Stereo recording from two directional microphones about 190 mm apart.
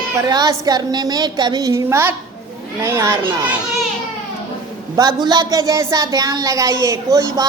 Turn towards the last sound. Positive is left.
turn(degrees=-15)  # may be behind; listen again after turning